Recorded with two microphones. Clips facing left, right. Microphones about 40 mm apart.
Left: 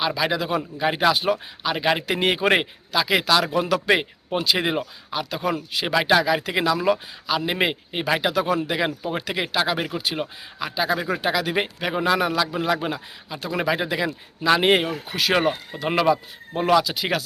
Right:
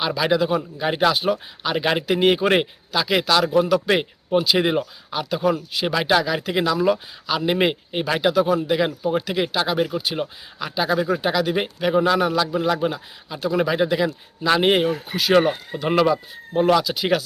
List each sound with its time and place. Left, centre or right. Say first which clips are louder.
0.1 s a man's voice: right 3 dB; centre
8.4 s speech: right 3 dB; centre
8.6 s a man's voice: right 4 dB; centre